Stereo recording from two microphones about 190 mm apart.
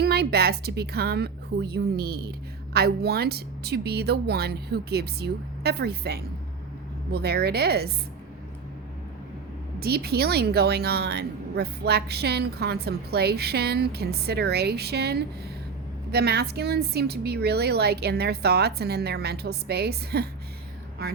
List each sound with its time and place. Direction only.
0.0 s a woman's voice: 55° right (ahead or behind)
9.8 s a woman's voice: 55° right (ahead or behind)